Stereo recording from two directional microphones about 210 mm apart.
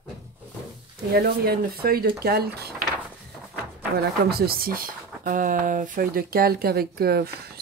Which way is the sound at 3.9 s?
45° right (ahead or behind).